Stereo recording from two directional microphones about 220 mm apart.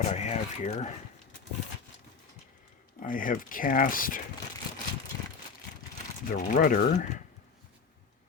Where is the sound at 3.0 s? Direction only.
40° left (ahead or behind).